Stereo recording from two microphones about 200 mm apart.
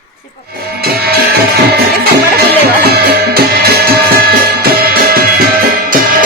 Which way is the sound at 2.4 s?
50° right (ahead or behind).